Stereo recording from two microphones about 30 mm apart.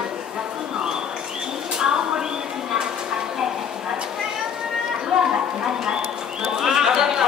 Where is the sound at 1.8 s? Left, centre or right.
Right.